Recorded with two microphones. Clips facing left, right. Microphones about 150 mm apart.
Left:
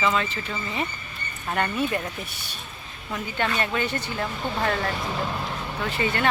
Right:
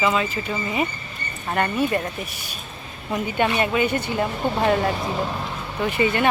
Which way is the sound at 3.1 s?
15° right (ahead or behind).